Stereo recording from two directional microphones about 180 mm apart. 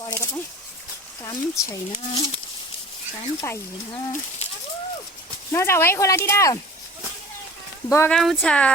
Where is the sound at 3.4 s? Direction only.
15° left (ahead or behind).